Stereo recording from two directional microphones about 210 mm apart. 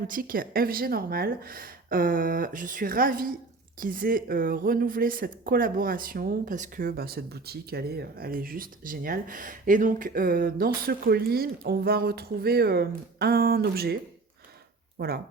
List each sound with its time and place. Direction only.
0.1 s speech: 45° right (ahead or behind)
14.9 s speech: 45° right (ahead or behind)